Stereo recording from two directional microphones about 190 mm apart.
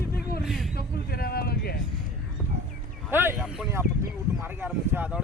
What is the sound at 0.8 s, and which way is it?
Speech, 55° left (ahead or behind).